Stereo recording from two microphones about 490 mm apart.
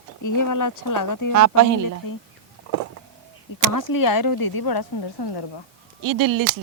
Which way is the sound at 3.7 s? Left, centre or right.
Left.